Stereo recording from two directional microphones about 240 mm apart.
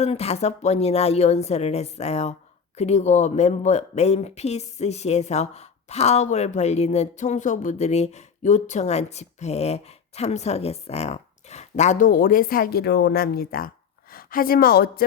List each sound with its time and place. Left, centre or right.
0.0 s a woman's voice: left